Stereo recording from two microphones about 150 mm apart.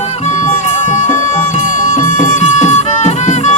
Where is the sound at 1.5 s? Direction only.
55° left (ahead or behind).